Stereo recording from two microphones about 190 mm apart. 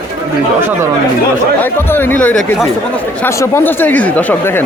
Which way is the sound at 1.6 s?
10° left (ahead or behind).